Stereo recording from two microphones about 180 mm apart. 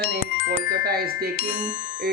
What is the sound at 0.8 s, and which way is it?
Speech, 55° right (ahead or behind).